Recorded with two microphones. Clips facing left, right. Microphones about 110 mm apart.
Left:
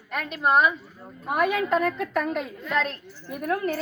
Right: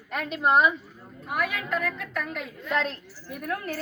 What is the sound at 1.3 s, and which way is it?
A woman's voice, 25° left (ahead or behind).